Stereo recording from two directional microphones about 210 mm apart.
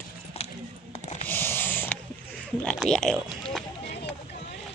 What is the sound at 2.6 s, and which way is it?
Speech, 5° left (ahead or behind).